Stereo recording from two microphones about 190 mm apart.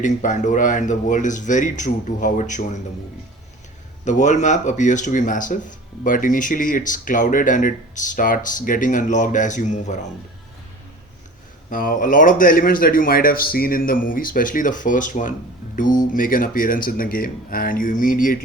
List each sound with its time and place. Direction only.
0.0 s speech: 40° left (ahead or behind)
4.0 s speech: 40° left (ahead or behind)
11.7 s speech: 45° left (ahead or behind)